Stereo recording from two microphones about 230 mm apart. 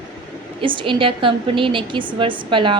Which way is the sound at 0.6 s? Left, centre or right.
Right.